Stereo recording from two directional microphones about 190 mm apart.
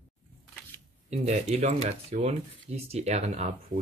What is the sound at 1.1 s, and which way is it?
Speech, 35° right (ahead or behind).